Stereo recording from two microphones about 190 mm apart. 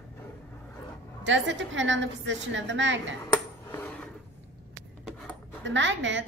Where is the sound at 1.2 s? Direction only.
70° right (ahead or behind).